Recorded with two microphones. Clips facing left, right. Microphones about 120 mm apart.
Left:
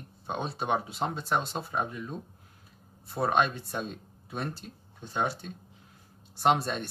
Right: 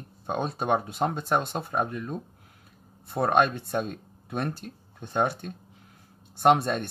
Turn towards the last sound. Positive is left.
turn(degrees=-55)  # may be behind; listen again after turning